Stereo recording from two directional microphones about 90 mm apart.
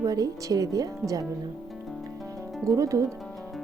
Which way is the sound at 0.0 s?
40° right (ahead or behind).